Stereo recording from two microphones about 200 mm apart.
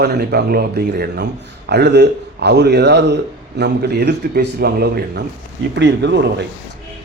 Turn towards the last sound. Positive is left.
turn(degrees=-60)  # may be behind; listen again after turning